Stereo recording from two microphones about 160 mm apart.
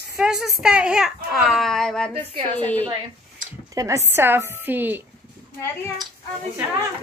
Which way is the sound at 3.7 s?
20° right (ahead or behind).